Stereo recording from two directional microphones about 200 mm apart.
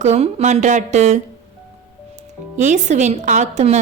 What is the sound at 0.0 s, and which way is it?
A woman's voice, 30° right (ahead or behind).